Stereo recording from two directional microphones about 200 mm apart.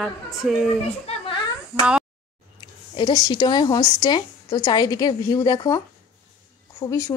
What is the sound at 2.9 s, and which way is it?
A woman's voice, 20° left (ahead or behind).